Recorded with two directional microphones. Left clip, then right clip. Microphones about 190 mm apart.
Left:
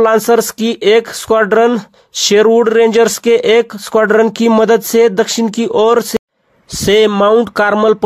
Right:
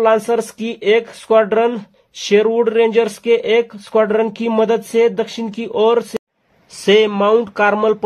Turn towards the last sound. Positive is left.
turn(degrees=30)  # may be behind; listen again after turning